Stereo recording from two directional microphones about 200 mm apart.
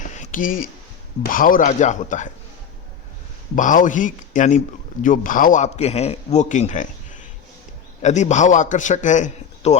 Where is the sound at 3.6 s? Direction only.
40° left (ahead or behind).